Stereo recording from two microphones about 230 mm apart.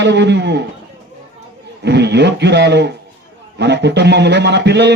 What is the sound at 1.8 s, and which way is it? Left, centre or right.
A man's voice, right.